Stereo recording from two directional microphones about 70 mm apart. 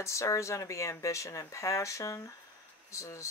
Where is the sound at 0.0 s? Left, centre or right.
Left.